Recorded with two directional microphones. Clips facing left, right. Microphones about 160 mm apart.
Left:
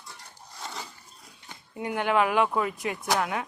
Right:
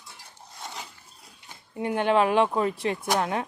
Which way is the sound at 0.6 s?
Centre (ahead or behind).